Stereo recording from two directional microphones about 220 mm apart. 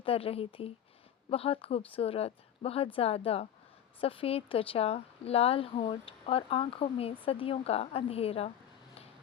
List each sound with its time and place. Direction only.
0.0 s speech: 25° left (ahead or behind)